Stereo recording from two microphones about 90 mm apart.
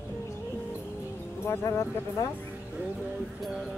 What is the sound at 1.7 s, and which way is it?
Speech, 30° left (ahead or behind).